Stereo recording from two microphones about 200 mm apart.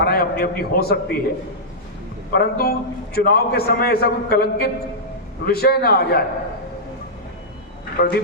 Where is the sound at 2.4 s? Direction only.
50° left (ahead or behind).